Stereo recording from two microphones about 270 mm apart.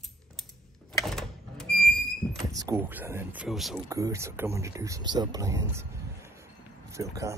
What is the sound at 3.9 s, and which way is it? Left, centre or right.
Speech, centre.